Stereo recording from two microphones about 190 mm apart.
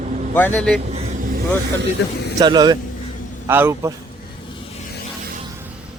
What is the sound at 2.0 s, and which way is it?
Speech, 65° left (ahead or behind).